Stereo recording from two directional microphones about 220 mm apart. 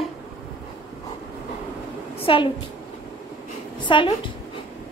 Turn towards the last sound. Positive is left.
turn(degrees=20)  # may be behind; listen again after turning